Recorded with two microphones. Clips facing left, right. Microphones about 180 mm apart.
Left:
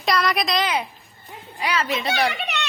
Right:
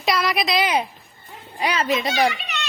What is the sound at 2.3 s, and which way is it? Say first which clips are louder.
Chicken: left 3 dB; 60° left (ahead or behind).